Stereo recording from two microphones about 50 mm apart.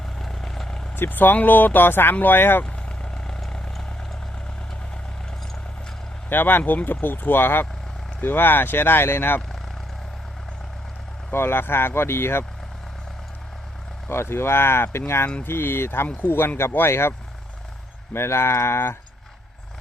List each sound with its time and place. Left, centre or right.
0.2 s vehicle: centre
0.9 s speech: left
2.6 s vehicle: centre
6.2 s speech: left
11.3 s speech: left
14.1 s speech: left
15.4 s speech: left